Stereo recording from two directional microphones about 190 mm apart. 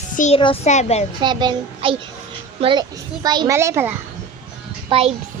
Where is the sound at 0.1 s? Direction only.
40° left (ahead or behind).